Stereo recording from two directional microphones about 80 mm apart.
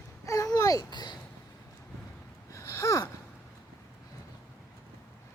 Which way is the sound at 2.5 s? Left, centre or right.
Left.